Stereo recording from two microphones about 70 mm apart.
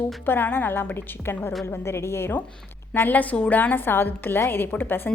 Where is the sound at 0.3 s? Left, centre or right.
Left.